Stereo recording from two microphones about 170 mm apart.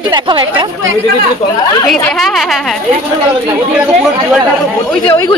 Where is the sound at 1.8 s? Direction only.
Centre (ahead or behind).